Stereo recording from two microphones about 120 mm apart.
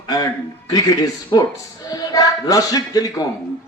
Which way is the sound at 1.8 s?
30° left (ahead or behind).